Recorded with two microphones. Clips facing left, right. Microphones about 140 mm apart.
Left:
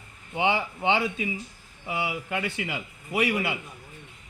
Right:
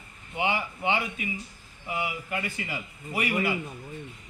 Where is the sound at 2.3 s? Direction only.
90° left.